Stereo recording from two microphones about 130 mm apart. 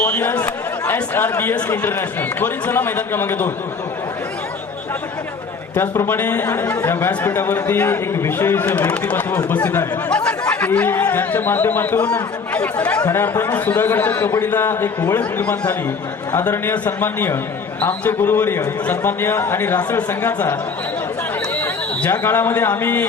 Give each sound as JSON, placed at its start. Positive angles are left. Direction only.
{"t": 0.0, "sound": "speech", "side_deg": 15}
{"t": 5.7, "sound": "a man's voice", "side_deg": 20}